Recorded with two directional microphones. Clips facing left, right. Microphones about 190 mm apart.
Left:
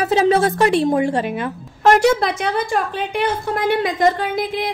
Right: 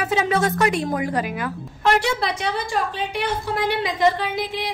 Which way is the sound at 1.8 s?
45° left (ahead or behind).